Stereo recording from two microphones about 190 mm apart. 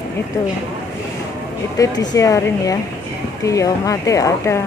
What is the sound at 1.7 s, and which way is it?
Speech, 20° left (ahead or behind).